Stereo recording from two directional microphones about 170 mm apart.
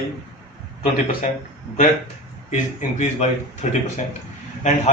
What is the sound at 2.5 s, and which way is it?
Speech, 45° left (ahead or behind).